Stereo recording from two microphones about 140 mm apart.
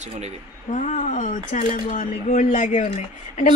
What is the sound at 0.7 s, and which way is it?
Speech, 60° left (ahead or behind).